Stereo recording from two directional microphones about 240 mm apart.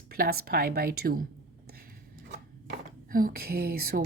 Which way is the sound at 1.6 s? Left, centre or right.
Right.